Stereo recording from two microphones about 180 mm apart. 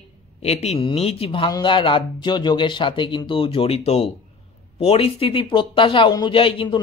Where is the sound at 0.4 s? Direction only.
35° left (ahead or behind).